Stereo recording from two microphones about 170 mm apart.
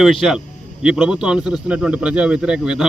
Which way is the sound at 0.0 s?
Centre (ahead or behind).